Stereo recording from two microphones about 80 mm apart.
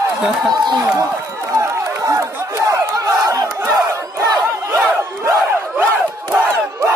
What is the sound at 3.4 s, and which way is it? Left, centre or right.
Battle cry, right.